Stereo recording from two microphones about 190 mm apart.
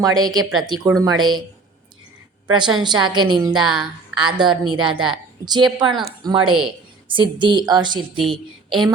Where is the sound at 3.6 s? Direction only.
Centre (ahead or behind).